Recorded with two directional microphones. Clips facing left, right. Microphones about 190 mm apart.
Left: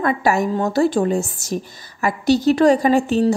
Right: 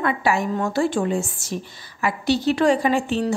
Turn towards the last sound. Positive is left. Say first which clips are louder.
# left 4 dB
turn(degrees=40)  # may be behind; listen again after turning